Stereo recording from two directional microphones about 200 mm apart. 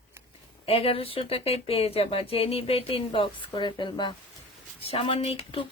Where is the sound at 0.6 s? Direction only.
30° left (ahead or behind).